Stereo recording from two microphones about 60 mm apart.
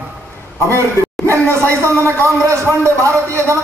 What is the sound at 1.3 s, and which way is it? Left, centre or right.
Speech, right.